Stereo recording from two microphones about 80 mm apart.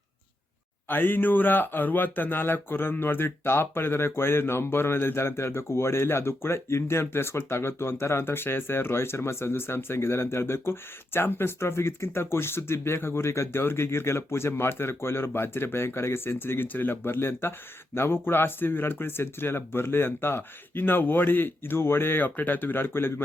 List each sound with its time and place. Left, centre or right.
0.9 s speech: left